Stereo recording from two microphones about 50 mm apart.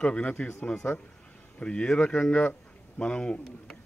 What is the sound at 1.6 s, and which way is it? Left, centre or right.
A man's voice, left.